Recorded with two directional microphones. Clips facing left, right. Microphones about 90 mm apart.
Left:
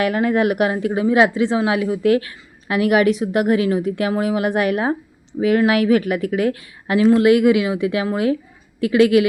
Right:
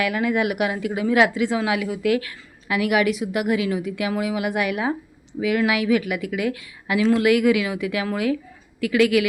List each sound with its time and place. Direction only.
0.0 s speech: 40° left (ahead or behind)